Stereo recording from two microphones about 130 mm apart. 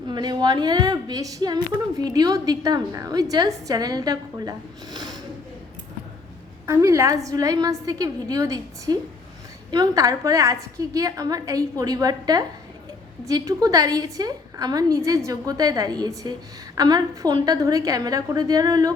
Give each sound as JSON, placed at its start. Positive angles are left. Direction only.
{"t": 0.1, "sound": "a woman's voice", "side_deg": -35}
{"t": 6.7, "sound": "a woman's voice", "side_deg": -20}